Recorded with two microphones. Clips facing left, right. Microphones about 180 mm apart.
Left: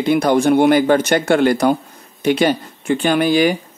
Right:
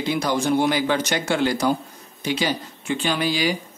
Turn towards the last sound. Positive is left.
turn(degrees=55)  # may be behind; listen again after turning